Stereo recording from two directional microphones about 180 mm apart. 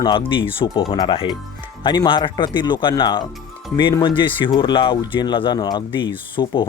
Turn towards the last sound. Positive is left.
turn(degrees=25)  # may be behind; listen again after turning